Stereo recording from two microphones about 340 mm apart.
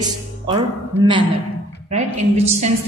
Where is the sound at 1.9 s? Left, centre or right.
Centre.